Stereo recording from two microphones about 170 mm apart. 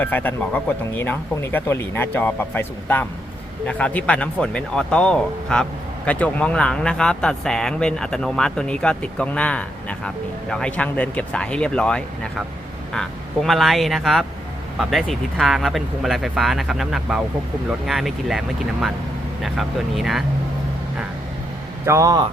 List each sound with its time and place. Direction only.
0.0 s speech: 10° left (ahead or behind)
21.8 s speech: 20° right (ahead or behind)